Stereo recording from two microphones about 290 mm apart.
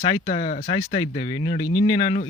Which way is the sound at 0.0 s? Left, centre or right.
Left.